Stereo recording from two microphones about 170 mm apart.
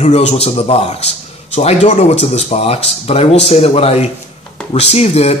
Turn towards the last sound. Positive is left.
turn(degrees=40)  # may be behind; listen again after turning